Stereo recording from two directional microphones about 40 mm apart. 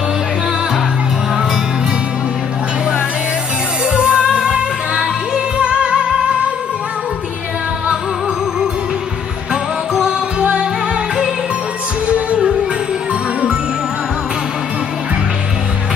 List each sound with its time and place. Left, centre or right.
3.8 s music: right
10.4 s music: right